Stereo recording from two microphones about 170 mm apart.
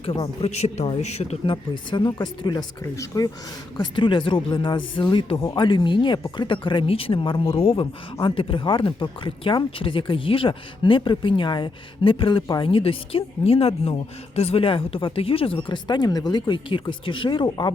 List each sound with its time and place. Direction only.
0.0 s speech: 35° left (ahead or behind)